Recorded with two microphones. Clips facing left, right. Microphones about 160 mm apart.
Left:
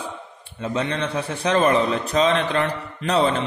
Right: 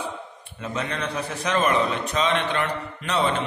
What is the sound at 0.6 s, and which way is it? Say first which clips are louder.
A man's voice: left 5 dB; 30° left (ahead or behind).